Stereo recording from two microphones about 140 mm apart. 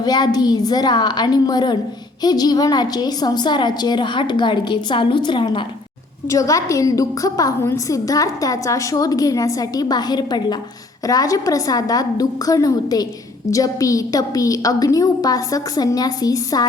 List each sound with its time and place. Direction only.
0.0 s a woman's voice: 30° left (ahead or behind)
6.2 s a woman's voice: 25° left (ahead or behind)